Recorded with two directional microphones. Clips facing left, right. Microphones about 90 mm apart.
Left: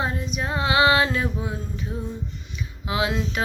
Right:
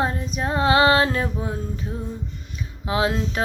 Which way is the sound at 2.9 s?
35° right (ahead or behind).